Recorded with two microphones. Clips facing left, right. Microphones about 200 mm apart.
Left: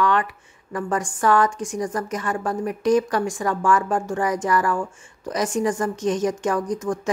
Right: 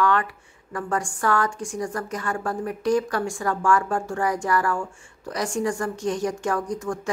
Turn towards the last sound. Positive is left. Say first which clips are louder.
# left 3 dB
turn(degrees=20)  # may be behind; listen again after turning